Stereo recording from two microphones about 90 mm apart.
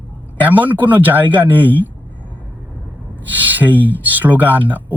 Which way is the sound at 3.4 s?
20° right (ahead or behind).